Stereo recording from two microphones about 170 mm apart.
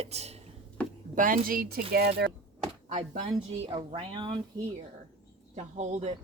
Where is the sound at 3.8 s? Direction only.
30° right (ahead or behind).